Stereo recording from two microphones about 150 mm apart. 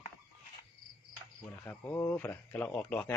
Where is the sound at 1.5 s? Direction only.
15° left (ahead or behind).